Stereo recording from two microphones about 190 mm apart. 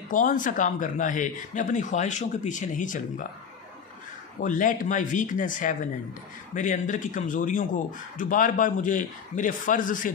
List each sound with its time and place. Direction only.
0.1 s speech: 45° left (ahead or behind)
4.4 s speech: 45° left (ahead or behind)